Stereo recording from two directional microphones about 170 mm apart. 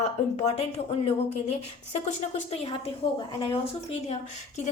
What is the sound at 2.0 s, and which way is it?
A woman's voice, 40° left (ahead or behind).